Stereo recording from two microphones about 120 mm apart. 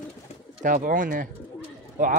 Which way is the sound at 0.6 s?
90° right.